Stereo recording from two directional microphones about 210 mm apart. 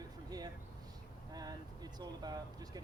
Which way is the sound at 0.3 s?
20° right (ahead or behind).